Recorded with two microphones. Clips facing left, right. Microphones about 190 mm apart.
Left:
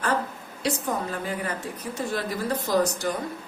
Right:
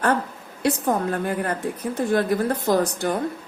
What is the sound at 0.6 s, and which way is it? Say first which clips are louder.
Speech: right 6 dB; 55° right (ahead or behind).